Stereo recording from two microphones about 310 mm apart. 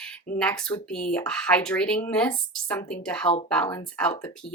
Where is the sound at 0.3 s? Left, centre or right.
Centre.